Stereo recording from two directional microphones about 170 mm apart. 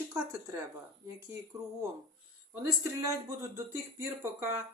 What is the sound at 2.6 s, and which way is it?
Speech, 20° right (ahead or behind).